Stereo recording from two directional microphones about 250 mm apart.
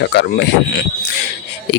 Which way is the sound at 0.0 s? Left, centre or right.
Left.